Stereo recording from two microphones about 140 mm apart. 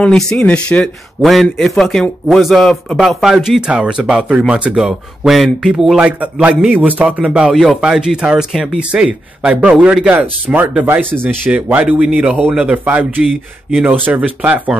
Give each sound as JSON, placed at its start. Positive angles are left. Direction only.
{"t": 0.0, "sound": "a man's voice", "side_deg": 5}